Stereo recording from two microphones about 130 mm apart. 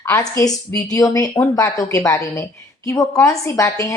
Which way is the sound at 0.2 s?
30° left (ahead or behind).